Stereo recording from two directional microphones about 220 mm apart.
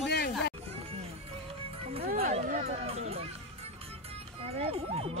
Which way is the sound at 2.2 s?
35° right (ahead or behind).